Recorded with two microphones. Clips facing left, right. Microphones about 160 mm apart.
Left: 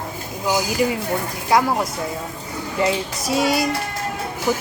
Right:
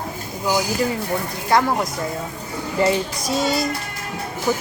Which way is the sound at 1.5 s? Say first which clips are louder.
Even; 10° left (ahead or behind).